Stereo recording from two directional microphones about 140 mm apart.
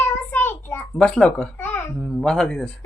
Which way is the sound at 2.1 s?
5° left (ahead or behind).